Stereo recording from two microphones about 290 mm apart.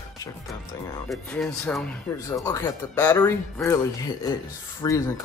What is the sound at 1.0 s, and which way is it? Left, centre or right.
Speech, centre.